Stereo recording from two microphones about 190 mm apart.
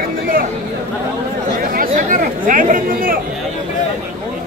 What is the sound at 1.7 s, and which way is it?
Chatter, 45° right (ahead or behind).